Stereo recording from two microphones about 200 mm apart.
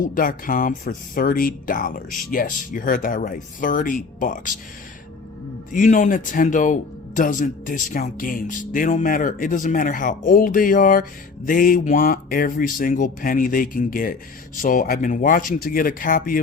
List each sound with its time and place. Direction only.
0.0 s speech: 45° left (ahead or behind)
5.7 s speech: 40° left (ahead or behind)